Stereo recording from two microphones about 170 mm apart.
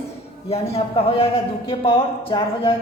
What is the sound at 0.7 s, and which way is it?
A man's voice, 35° left (ahead or behind).